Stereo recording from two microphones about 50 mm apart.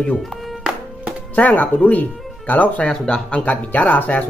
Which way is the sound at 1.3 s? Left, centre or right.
Left.